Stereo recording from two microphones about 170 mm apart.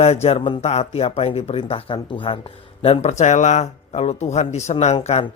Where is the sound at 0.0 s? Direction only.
40° left (ahead or behind).